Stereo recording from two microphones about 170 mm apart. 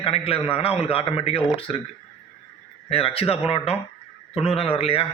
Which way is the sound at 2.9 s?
35° left (ahead or behind).